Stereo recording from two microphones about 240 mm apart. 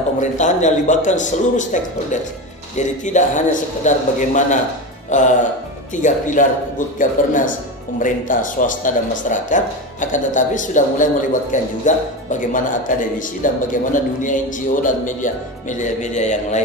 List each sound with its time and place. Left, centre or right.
0.2 s speech: left
2.8 s speech: left